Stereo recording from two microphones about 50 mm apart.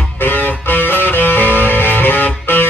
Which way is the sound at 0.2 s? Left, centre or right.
Left.